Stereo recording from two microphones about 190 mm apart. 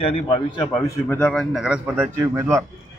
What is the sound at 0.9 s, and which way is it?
A man's voice, 10° left (ahead or behind).